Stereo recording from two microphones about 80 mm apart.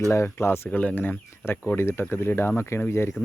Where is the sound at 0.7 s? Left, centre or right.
Centre.